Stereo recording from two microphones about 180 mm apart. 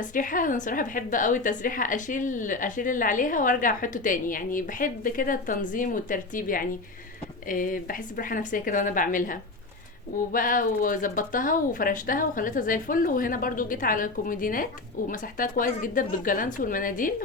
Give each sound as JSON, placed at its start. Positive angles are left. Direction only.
{"t": 0.0, "sound": "speech", "side_deg": 45}